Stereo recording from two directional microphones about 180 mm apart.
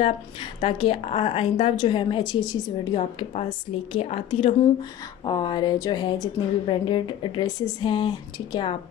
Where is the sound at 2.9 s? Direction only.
35° left (ahead or behind).